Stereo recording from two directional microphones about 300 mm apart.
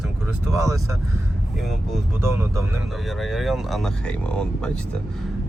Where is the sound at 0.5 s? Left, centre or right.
Centre.